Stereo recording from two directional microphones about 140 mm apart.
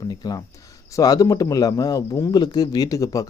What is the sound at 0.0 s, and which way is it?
A man's voice, 25° left (ahead or behind).